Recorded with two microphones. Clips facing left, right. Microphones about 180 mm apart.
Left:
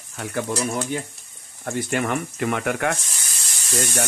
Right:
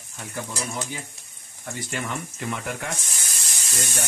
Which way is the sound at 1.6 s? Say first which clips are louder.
Left 8 dB; 60° left (ahead or behind).